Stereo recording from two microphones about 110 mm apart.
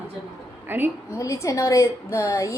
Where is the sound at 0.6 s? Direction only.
20° right (ahead or behind).